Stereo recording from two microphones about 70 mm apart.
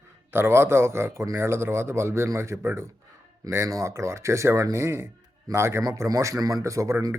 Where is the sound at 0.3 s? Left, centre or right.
Right.